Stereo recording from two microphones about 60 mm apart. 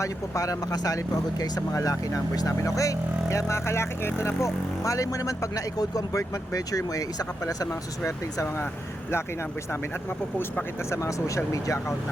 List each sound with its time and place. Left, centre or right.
0.0 s speech: left
7.7 s speech: left
10.1 s speech: left
10.8 s speech: left